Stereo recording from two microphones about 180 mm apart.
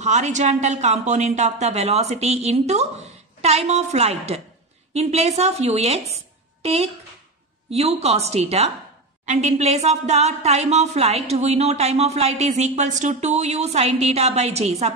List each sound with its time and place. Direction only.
0.0 s speech: 40° right (ahead or behind)